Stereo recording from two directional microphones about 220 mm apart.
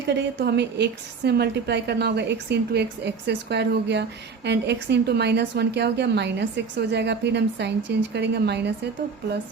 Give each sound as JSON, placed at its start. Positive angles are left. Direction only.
{"t": 0.1, "sound": "a woman's voice", "side_deg": -50}